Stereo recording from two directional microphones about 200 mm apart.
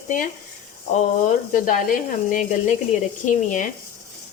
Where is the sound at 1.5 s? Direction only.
45° left (ahead or behind).